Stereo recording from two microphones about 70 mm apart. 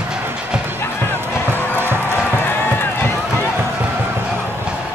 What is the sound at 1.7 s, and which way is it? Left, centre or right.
Music, right.